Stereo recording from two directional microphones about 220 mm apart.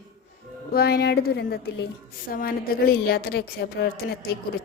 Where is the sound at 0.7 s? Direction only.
45° left (ahead or behind).